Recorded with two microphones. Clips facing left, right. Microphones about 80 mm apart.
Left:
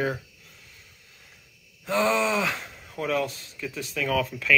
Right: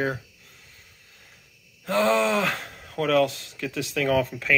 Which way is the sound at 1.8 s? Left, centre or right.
Right.